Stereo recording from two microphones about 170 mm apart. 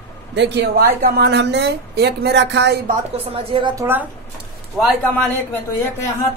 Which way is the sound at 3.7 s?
15° right (ahead or behind).